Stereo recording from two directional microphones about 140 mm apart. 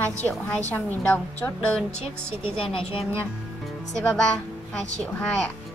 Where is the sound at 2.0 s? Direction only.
40° left (ahead or behind).